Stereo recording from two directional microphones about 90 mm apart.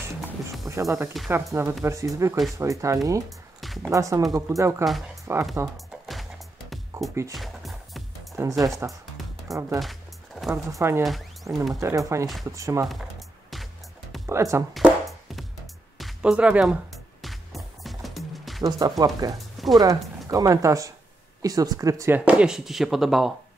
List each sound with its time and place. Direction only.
0.7 s speech: 35° right (ahead or behind)
3.3 s music: centre (ahead or behind)
3.9 s speech: 35° right (ahead or behind)
6.9 s music: 35° right (ahead or behind)
7.3 s music: centre (ahead or behind)
8.4 s speech: 40° right (ahead or behind)
14.2 s speech: 35° right (ahead or behind)
16.2 s speech: 10° right (ahead or behind)
16.9 s music: centre (ahead or behind)
18.6 s speech: 45° right (ahead or behind)
22.1 s speech: 15° right (ahead or behind)